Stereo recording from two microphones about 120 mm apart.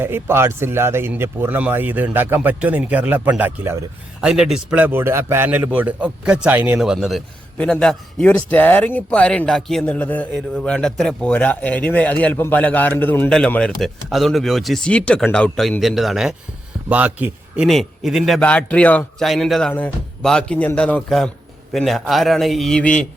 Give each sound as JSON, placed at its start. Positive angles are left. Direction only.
{"t": 0.0, "sound": "speech", "side_deg": -20}
{"t": 4.2, "sound": "a man's voice", "side_deg": -5}
{"t": 16.9, "sound": "speech", "side_deg": -15}
{"t": 17.7, "sound": "a man's voice", "side_deg": 0}
{"t": 18.4, "sound": "a man's voice", "side_deg": 10}
{"t": 19.2, "sound": "a man's voice", "side_deg": 0}